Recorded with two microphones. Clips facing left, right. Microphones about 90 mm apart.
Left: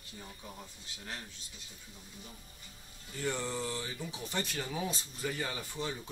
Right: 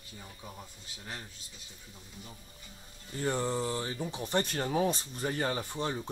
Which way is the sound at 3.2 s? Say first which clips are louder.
Right 4 dB; 35° right (ahead or behind).